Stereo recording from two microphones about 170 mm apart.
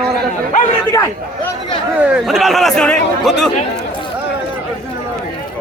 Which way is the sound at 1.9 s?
Centre (ahead or behind).